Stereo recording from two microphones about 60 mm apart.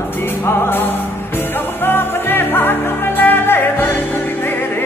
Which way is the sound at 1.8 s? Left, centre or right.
Left.